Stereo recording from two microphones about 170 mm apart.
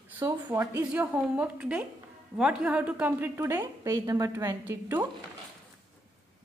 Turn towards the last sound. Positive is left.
turn(degrees=-15)  # may be behind; listen again after turning